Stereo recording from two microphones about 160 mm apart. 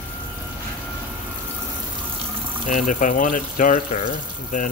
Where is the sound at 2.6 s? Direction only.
55° left (ahead or behind).